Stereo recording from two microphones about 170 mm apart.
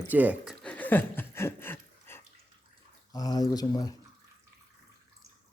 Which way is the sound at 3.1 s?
20° left (ahead or behind).